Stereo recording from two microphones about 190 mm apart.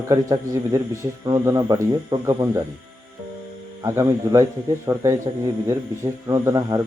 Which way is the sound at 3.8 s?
15° right (ahead or behind).